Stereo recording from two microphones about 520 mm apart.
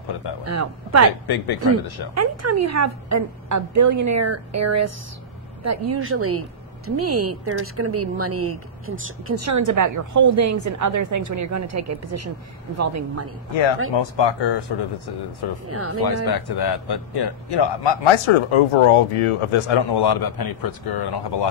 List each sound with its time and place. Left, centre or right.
0.5 s speech: right
1.2 s speech: left
2.1 s speech: right
13.9 s speech: left
15.7 s speech: right
16.3 s a man's voice: left
19.9 s speech: left